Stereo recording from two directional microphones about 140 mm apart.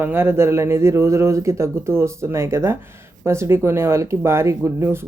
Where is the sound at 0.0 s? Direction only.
15° right (ahead or behind).